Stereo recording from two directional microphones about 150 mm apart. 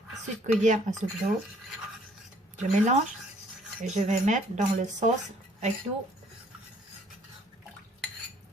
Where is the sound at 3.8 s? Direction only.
50° right (ahead or behind).